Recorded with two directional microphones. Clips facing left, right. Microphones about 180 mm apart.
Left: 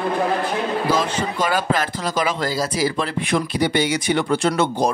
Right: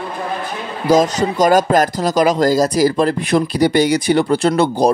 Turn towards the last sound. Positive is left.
turn(degrees=-35)  # may be behind; listen again after turning